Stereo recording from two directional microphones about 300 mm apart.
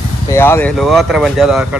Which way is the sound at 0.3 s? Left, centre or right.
Centre.